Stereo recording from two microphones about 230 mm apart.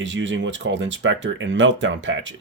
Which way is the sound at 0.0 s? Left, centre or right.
Right.